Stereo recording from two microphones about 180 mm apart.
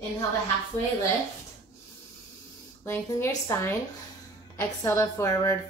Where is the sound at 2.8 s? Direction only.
15° left (ahead or behind).